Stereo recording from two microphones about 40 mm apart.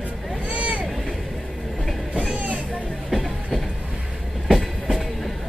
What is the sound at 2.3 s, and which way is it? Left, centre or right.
Music, right.